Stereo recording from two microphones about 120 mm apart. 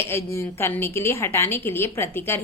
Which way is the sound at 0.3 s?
20° left (ahead or behind).